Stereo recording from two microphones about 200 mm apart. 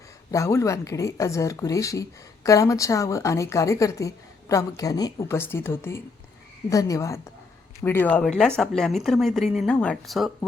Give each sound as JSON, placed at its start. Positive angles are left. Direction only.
{"t": 0.3, "sound": "speech", "side_deg": 15}